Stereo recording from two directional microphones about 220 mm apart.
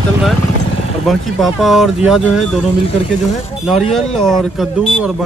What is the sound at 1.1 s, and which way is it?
Speech, centre (ahead or behind).